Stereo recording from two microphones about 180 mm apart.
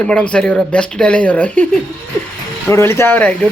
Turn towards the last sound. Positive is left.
turn(degrees=10)  # may be behind; listen again after turning